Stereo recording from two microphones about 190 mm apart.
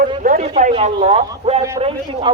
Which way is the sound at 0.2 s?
45° right (ahead or behind).